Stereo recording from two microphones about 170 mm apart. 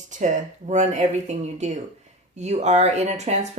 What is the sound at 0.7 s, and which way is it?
Speech, 45° right (ahead or behind).